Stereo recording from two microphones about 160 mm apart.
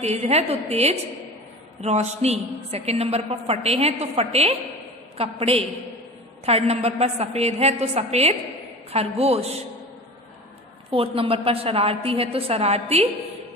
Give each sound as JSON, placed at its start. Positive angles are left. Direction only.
{"t": 0.0, "sound": "a woman's voice", "side_deg": -40}
{"t": 10.9, "sound": "a woman's voice", "side_deg": -35}